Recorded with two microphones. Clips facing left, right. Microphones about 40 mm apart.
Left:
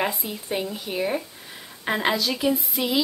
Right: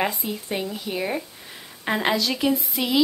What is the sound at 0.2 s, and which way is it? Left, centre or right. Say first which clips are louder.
A woman's voice: even; centre.